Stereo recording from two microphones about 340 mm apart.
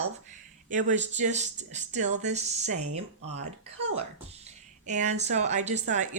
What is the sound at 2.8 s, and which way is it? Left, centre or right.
Speech, right.